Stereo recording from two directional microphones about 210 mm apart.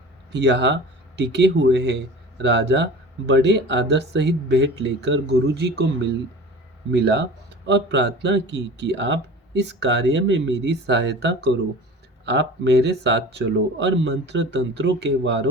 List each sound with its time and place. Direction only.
0.3 s speech: 55° right (ahead or behind)
6.9 s speech: 55° right (ahead or behind)